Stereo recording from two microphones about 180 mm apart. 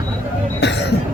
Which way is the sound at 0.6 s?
75° left (ahead or behind).